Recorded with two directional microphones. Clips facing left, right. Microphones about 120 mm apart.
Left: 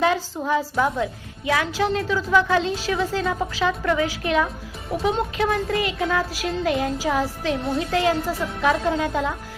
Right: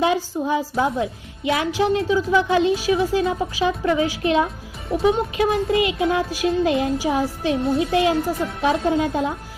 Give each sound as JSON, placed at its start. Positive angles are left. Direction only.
{"t": 0.0, "sound": "a woman's voice", "side_deg": -20}